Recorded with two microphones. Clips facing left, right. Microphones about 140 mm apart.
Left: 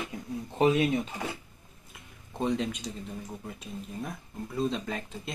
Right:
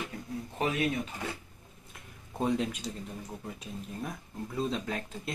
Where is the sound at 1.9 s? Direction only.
5° right (ahead or behind).